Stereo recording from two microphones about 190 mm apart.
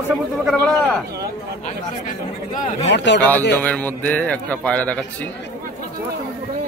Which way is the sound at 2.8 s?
65° left (ahead or behind).